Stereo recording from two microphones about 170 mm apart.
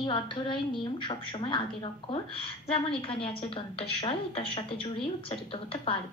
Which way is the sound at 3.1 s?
30° left (ahead or behind).